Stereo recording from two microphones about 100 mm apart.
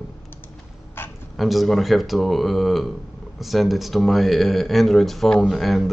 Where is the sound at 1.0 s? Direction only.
20° left (ahead or behind).